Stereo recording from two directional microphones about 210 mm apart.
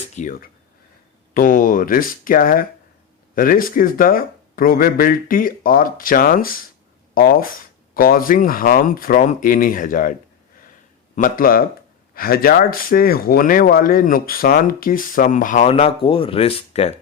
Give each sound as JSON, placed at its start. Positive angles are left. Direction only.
{"t": 0.2, "sound": "speech", "side_deg": 40}